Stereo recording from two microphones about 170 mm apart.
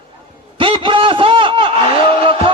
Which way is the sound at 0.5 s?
30° right (ahead or behind).